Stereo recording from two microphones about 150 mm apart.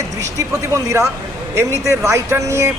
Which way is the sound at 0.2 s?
20° right (ahead or behind).